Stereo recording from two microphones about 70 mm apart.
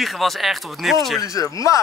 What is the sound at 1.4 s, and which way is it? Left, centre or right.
Speech, left.